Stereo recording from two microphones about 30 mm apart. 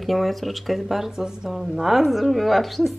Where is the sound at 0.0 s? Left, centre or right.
Centre.